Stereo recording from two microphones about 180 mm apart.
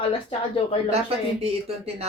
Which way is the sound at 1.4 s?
35° right (ahead or behind).